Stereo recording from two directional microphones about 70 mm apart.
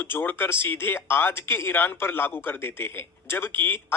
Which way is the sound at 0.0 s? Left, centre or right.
Left.